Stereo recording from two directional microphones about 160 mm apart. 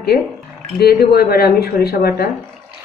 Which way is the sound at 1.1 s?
75° left (ahead or behind).